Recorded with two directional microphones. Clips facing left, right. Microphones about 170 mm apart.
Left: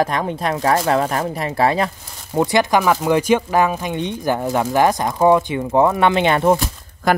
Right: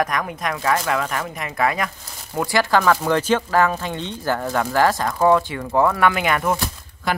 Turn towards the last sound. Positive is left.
turn(degrees=45)  # may be behind; listen again after turning